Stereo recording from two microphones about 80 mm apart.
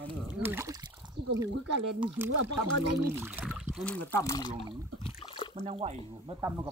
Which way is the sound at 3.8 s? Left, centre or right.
Centre.